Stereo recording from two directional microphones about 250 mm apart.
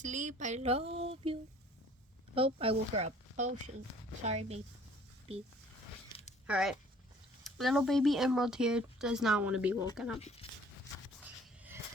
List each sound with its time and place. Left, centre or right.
0.0 s speech: right
6.5 s speech: centre
11.2 s a sound: centre